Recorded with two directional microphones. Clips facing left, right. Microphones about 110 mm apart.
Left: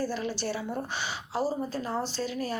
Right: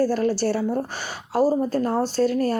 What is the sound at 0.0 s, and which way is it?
Speech, 45° right (ahead or behind).